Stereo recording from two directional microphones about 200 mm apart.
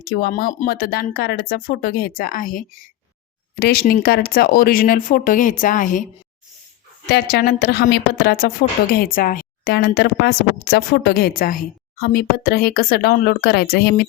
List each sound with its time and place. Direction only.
0.0 s a woman's voice: 50° left (ahead or behind)
7.1 s a woman's voice: 50° left (ahead or behind)